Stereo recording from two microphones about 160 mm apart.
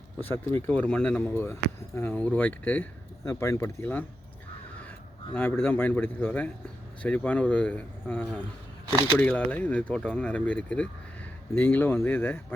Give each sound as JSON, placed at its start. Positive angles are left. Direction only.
{"t": 0.2, "sound": "speech", "side_deg": 10}
{"t": 5.3, "sound": "speech", "side_deg": 15}